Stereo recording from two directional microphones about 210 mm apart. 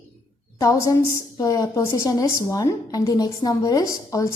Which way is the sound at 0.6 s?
15° left (ahead or behind).